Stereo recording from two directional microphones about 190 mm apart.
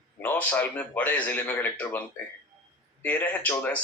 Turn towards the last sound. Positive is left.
turn(degrees=10)  # may be behind; listen again after turning